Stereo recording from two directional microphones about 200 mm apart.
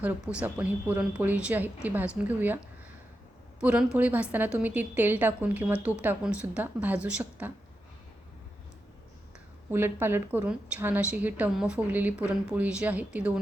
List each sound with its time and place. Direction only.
0.0 s a woman's voice: 5° right (ahead or behind)
3.6 s a woman's voice: 5° right (ahead or behind)
9.7 s a woman's voice: 10° right (ahead or behind)